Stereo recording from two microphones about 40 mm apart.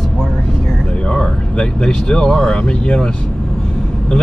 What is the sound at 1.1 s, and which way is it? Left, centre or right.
Speech, left.